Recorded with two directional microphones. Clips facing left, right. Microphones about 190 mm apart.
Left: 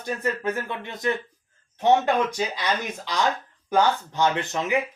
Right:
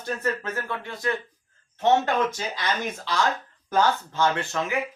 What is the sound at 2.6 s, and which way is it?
Speech, 15° left (ahead or behind).